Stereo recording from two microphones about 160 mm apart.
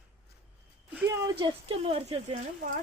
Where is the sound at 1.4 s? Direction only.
35° right (ahead or behind).